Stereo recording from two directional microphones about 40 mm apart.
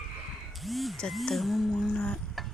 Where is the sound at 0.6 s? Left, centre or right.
Centre.